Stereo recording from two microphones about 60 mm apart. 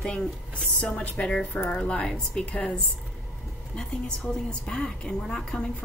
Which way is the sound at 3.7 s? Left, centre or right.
Centre.